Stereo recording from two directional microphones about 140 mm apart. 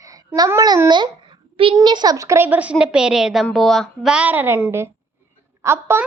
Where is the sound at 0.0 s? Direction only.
25° right (ahead or behind).